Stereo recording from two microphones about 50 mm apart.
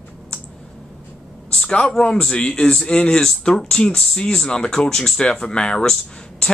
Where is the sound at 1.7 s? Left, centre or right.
Centre.